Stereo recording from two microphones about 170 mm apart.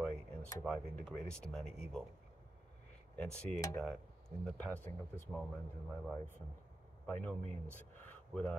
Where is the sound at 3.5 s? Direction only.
20° left (ahead or behind).